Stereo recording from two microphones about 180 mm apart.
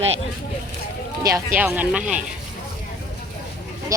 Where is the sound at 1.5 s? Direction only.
10° right (ahead or behind).